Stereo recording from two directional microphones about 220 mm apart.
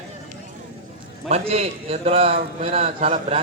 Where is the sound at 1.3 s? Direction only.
30° right (ahead or behind).